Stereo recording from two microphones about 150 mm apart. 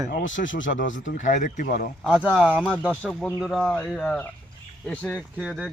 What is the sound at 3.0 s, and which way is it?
Speech, 10° left (ahead or behind).